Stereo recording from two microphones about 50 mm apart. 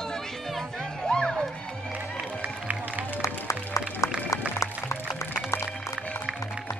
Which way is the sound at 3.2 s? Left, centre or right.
Left.